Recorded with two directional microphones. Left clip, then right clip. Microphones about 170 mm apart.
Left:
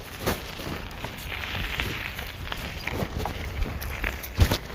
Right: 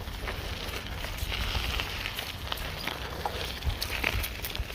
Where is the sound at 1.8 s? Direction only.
10° left (ahead or behind).